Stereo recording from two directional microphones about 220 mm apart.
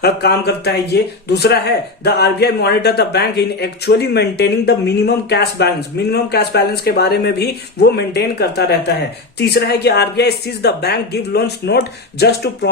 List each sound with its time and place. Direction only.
0.0 s speech: 45° left (ahead or behind)